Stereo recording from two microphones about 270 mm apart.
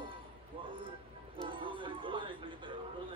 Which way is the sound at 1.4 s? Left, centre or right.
Centre.